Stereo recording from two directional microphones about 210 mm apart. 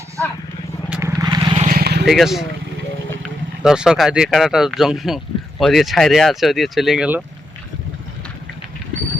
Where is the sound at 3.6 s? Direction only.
5° right (ahead or behind).